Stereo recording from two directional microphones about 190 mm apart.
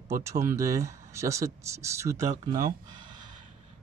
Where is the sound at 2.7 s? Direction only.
20° right (ahead or behind).